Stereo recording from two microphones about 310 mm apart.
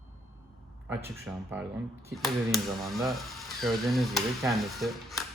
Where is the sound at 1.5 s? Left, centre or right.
Centre.